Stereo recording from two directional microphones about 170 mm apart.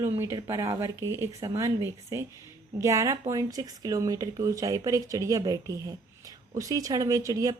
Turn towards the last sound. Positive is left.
turn(degrees=-20)  # may be behind; listen again after turning